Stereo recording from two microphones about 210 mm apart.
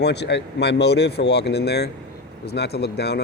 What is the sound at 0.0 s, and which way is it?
Speech, 55° left (ahead or behind).